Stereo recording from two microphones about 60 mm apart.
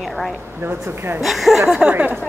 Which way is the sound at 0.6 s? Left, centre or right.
Right.